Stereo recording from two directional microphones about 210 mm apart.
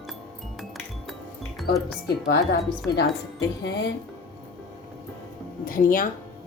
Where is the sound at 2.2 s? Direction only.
50° left (ahead or behind).